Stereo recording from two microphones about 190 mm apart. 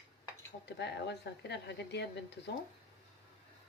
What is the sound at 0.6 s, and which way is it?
Speech, 65° left (ahead or behind).